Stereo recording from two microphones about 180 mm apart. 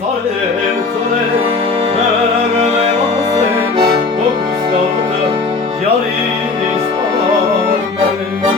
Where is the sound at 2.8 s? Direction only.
25° right (ahead or behind).